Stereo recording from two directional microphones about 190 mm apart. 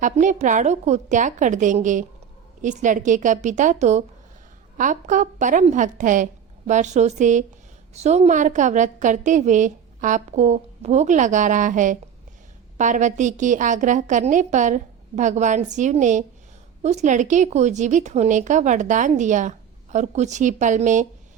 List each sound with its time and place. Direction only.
0.0 s a woman's voice: 40° right (ahead or behind)